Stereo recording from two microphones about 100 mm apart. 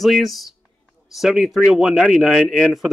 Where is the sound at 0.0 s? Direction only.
Centre (ahead or behind).